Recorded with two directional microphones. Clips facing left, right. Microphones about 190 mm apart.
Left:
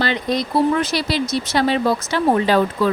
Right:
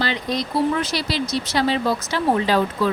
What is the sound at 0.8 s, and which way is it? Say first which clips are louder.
A woman's voice: left 3 dB; 50° left (ahead or behind).